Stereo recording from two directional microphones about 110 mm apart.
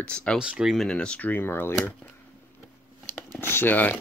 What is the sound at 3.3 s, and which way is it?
Speech, 20° left (ahead or behind).